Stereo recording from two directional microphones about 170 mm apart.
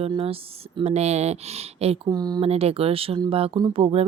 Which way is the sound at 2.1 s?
25° right (ahead or behind).